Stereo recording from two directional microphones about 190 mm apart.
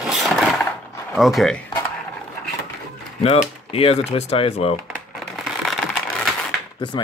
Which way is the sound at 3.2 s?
30° left (ahead or behind).